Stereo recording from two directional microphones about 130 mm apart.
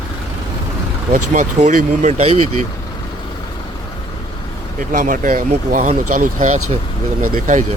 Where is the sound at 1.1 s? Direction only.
75° right (ahead or behind); by 2.3 s 55° right (ahead or behind).